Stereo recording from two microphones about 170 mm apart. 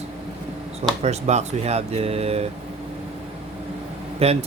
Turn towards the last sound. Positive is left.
turn(degrees=-35)  # may be behind; listen again after turning